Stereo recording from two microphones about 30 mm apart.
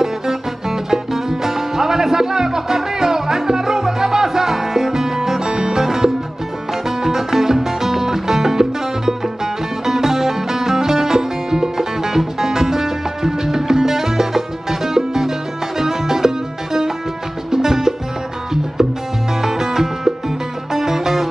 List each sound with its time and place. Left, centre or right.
0.0 s music: centre
19.4 s music: centre